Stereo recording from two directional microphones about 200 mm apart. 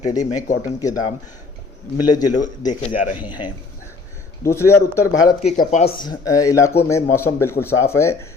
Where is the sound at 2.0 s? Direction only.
20° left (ahead or behind).